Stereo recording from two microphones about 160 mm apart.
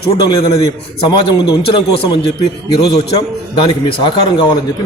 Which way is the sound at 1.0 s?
35° left (ahead or behind).